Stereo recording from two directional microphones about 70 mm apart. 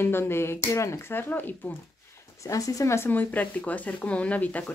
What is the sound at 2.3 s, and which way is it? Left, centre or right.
Speech, left.